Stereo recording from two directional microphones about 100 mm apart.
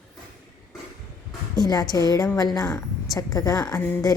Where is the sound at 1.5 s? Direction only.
40° left (ahead or behind).